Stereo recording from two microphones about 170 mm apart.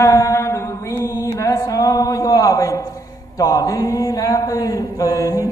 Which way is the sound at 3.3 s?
20° left (ahead or behind).